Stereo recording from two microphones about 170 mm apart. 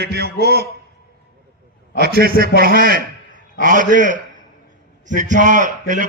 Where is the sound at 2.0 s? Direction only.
60° right (ahead or behind).